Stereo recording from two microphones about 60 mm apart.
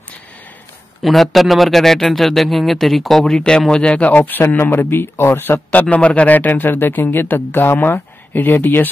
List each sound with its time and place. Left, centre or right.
1.0 s speech: centre; by 8.8 s left